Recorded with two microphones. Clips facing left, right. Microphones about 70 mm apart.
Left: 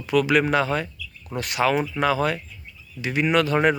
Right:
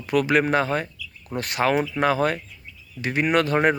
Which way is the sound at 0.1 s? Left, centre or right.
Right.